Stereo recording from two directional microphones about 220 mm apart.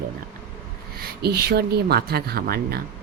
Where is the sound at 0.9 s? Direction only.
45° right (ahead or behind).